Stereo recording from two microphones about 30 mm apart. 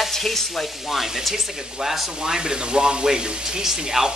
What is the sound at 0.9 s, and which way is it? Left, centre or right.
Frying, centre.